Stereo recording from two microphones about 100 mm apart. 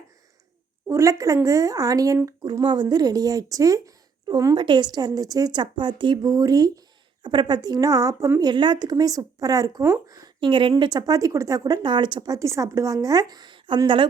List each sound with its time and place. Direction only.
0.9 s speech: 30° right (ahead or behind)
4.5 s a woman's voice: 50° right (ahead or behind)
8.4 s speech: 50° right (ahead or behind)
10.4 s speech: 55° right (ahead or behind)